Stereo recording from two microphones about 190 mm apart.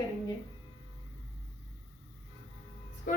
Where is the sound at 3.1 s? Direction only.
45° left (ahead or behind).